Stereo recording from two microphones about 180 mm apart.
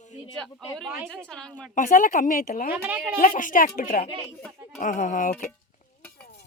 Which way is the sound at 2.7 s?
10° right (ahead or behind).